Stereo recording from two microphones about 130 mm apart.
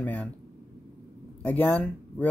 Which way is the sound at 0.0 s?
10° left (ahead or behind).